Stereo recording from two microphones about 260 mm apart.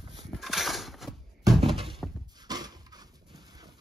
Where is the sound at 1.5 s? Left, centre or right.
Centre.